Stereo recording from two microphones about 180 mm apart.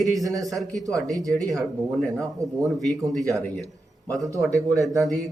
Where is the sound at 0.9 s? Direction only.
20° right (ahead or behind).